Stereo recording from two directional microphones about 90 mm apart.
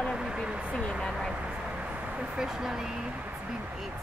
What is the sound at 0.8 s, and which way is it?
Speech, 5° left (ahead or behind).